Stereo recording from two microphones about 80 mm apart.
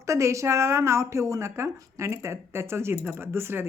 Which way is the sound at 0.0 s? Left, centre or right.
Right.